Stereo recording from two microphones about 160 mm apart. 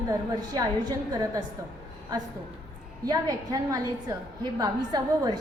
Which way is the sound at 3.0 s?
20° right (ahead or behind).